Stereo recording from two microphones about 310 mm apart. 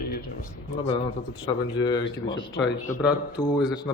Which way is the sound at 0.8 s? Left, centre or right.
Centre.